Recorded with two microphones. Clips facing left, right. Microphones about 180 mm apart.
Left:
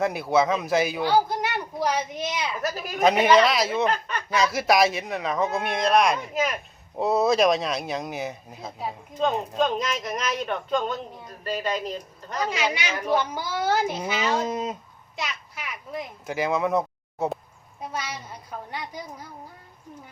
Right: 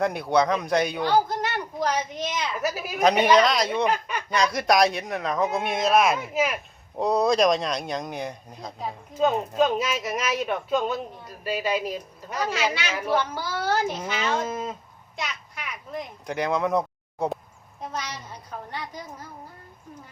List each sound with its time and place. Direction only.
0.0 s a man's voice: centre (ahead or behind)
2.6 s a woman's voice: 10° right (ahead or behind)
3.0 s a man's voice: 5° left (ahead or behind)
3.8 s speech: 10° right (ahead or behind)
4.3 s a man's voice: 5° left (ahead or behind)
13.1 s speech: 15° left (ahead or behind)
14.5 s speech: 20° left (ahead or behind)
15.1 s a child's voice: centre (ahead or behind)